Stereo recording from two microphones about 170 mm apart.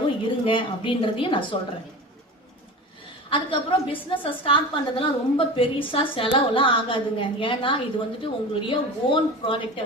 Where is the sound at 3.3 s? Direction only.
30° left (ahead or behind).